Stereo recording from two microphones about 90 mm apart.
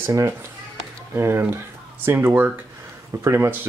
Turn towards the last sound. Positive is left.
turn(degrees=-35)  # may be behind; listen again after turning